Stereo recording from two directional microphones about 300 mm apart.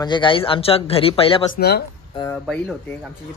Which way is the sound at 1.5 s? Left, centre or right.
Left.